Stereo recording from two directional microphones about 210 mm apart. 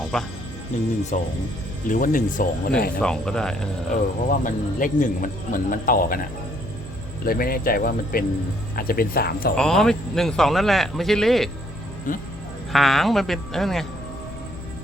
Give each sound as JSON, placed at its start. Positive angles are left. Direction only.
{"t": 0.1, "sound": "speech", "side_deg": 0}
{"t": 1.1, "sound": "a man's voice", "side_deg": 35}
{"t": 3.0, "sound": "speech", "side_deg": 5}
{"t": 3.9, "sound": "a man's voice", "side_deg": 40}
{"t": 7.3, "sound": "speech", "side_deg": 45}
{"t": 9.6, "sound": "speech", "side_deg": 0}
{"t": 12.1, "sound": "a man's voice", "side_deg": 40}
{"t": 12.7, "sound": "speech", "side_deg": 0}